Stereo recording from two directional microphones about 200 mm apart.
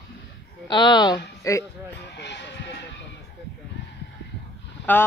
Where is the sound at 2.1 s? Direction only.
60° left (ahead or behind).